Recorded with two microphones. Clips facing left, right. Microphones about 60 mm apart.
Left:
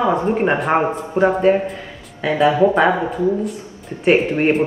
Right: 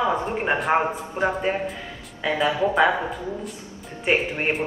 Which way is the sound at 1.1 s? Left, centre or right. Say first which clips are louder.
Left 12 dB; centre.